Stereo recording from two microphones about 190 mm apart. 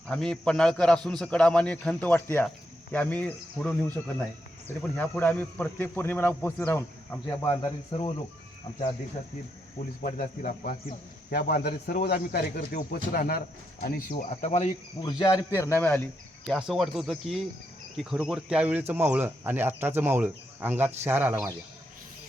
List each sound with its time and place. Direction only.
0.1 s a man's voice: 5° left (ahead or behind)
7.4 s speech: 25° left (ahead or behind)
10.0 s speech: 45° left (ahead or behind)
11.3 s speech: 55° left (ahead or behind); by 14.7 s 35° left (ahead or behind)
15.0 s speech: 20° left (ahead or behind)
16.5 s a man's voice: centre (ahead or behind)